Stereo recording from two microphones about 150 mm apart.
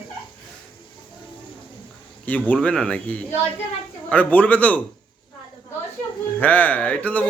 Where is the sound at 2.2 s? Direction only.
10° left (ahead or behind).